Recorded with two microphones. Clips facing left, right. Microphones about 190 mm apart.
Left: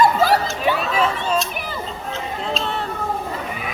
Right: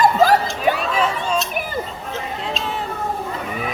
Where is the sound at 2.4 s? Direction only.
Centre (ahead or behind).